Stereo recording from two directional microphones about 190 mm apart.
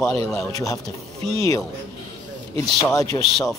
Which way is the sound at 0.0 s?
15° left (ahead or behind).